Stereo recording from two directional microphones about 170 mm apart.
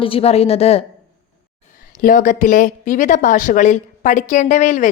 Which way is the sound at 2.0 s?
55° left (ahead or behind).